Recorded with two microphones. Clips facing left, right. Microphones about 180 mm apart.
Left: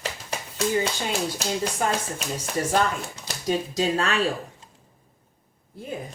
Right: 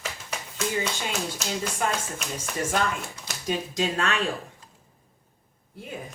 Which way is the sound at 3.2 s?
35° left (ahead or behind).